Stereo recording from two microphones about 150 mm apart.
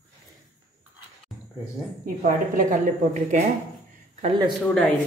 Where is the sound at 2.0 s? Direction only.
65° right (ahead or behind).